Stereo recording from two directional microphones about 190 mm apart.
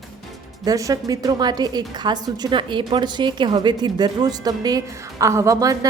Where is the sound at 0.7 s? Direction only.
20° right (ahead or behind).